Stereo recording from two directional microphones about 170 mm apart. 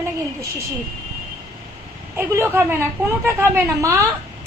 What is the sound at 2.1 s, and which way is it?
A woman's voice, 15° right (ahead or behind).